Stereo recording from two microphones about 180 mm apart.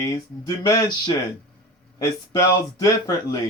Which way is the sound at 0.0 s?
15° left (ahead or behind).